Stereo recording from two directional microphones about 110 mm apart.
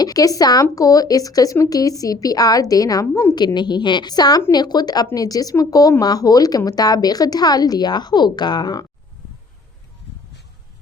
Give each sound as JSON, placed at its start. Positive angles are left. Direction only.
{"t": 0.0, "sound": "speech", "side_deg": 35}